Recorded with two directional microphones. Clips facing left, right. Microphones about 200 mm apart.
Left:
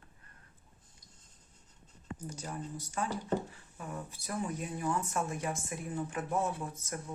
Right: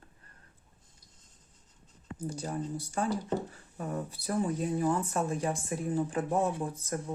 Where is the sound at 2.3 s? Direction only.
30° right (ahead or behind).